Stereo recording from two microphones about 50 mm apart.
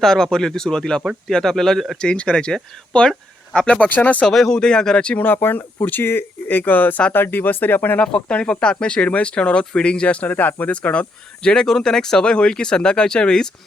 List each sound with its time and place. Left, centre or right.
0.0 s speech: centre
2.0 s speech: centre
3.8 s speech: left
4.3 s speech: centre
5.1 s speech: left
8.0 s speech: left
11.4 s speech: centre